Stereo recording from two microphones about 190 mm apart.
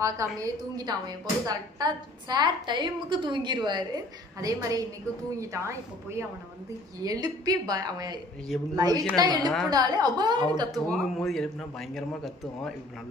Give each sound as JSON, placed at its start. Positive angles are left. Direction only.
{"t": 0.0, "sound": "a woman's voice", "side_deg": -15}
{"t": 10.7, "sound": "a man's voice", "side_deg": 5}